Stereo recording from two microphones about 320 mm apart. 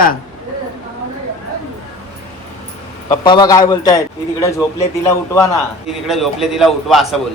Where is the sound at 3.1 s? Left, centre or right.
Centre.